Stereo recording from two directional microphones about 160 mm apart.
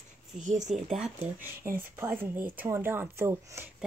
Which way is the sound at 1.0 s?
10° right (ahead or behind).